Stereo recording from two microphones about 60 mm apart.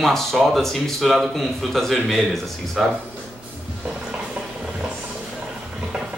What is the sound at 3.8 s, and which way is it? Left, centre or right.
Stir, centre.